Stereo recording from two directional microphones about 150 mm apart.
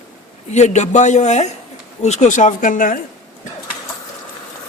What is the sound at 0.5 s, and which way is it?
A man's voice, 50° left (ahead or behind).